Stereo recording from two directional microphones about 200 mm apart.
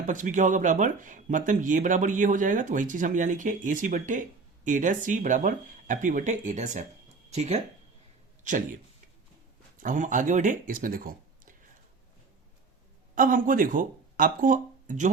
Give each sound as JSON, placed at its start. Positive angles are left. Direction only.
{"t": 0.0, "sound": "speech", "side_deg": -40}
{"t": 9.8, "sound": "speech", "side_deg": -40}
{"t": 13.1, "sound": "speech", "side_deg": -40}